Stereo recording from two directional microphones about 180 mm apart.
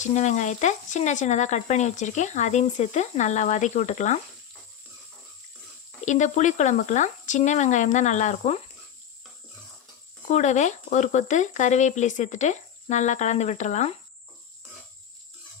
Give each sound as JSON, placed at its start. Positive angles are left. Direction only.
{"t": 0.0, "sound": "speech", "side_deg": 40}
{"t": 6.1, "sound": "speech", "side_deg": 40}
{"t": 10.2, "sound": "speech", "side_deg": 40}